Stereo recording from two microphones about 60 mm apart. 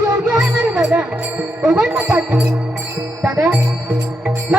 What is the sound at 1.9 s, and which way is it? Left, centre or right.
Speech, right.